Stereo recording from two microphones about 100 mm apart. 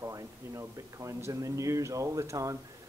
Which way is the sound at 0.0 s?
30° right (ahead or behind).